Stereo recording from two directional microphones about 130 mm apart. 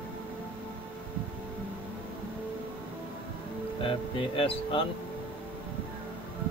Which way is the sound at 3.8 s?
45° left (ahead or behind).